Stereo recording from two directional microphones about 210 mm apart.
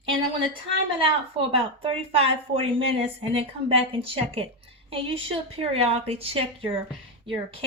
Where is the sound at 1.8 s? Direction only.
25° right (ahead or behind).